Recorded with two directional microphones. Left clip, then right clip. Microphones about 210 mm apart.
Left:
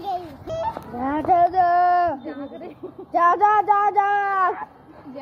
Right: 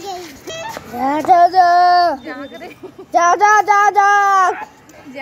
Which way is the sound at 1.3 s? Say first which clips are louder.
Right 7 dB; 35° right (ahead or behind).